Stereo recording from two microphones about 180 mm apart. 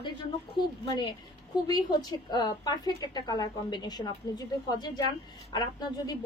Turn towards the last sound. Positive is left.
turn(degrees=25)  # may be behind; listen again after turning